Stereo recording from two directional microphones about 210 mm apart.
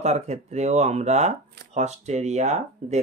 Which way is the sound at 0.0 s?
30° right (ahead or behind).